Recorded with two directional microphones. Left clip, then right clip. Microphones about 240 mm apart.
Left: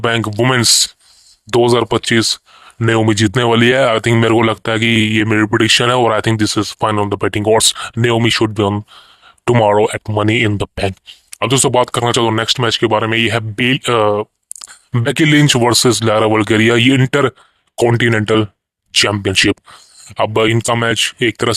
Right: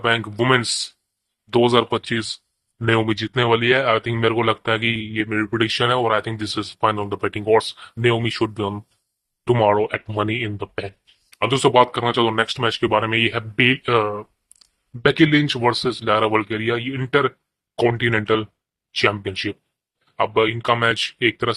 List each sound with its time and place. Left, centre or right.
0.0 s speech: left
20.7 s speech: left